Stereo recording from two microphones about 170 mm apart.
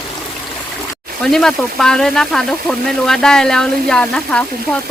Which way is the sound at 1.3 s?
Centre (ahead or behind).